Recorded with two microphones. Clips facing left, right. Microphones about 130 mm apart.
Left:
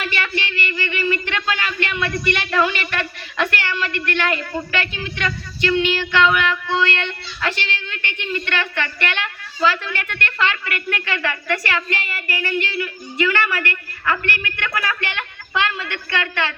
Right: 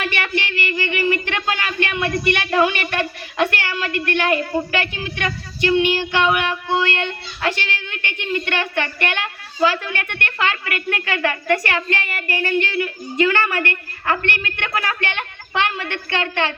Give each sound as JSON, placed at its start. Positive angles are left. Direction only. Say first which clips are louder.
{"t": 0.0, "sound": "speech", "louder": "right 2 dB", "side_deg": -20}
{"t": 11.7, "sound": "child singing", "louder": "right 2 dB", "side_deg": -25}
{"t": 16.0, "sound": "child singing", "louder": "right 2 dB", "side_deg": -25}